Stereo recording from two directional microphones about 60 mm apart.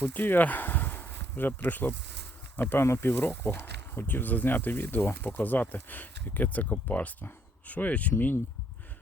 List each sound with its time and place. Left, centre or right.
0.0 s speech: left